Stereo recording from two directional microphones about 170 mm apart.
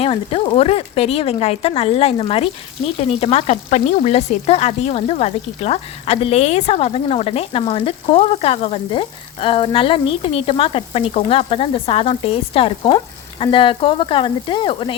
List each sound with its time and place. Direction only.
0.0 s speech: 35° left (ahead or behind)